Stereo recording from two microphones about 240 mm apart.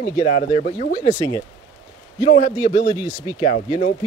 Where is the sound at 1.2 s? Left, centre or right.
Centre.